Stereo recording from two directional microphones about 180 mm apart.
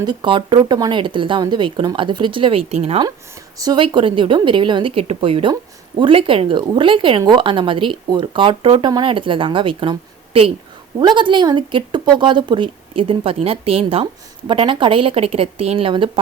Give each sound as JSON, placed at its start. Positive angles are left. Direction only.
{"t": 0.0, "sound": "speech", "side_deg": -25}
{"t": 3.6, "sound": "speech", "side_deg": -25}